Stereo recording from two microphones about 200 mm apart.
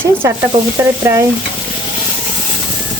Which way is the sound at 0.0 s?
10° right (ahead or behind).